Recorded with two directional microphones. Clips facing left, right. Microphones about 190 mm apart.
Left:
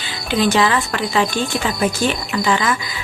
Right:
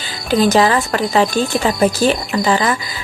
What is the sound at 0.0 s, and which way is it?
Speech, 40° right (ahead or behind).